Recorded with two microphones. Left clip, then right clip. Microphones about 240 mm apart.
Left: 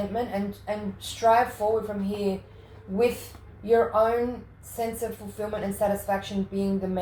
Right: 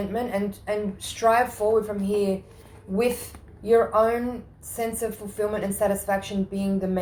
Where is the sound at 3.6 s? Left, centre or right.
Right.